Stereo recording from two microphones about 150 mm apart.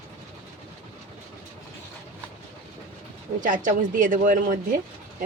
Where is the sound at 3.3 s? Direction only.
60° right (ahead or behind).